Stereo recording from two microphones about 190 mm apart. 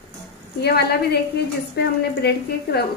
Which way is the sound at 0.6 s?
60° left (ahead or behind).